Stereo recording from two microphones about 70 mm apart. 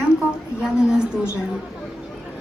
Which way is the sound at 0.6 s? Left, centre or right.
Centre.